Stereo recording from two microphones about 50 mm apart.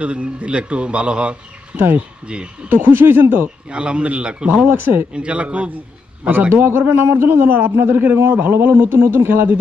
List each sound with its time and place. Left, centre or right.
0.0 s a man's voice: right
2.7 s a man's voice: right
3.7 s a man's voice: right
4.6 s a man's voice: right
5.1 s a man's voice: right
6.5 s a man's voice: right